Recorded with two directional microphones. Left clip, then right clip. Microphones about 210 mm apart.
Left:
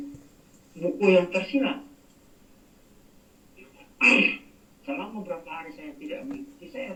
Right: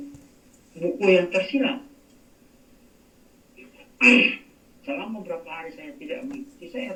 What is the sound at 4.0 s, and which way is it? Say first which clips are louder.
A man's voice: right 3 dB; 50° right (ahead or behind).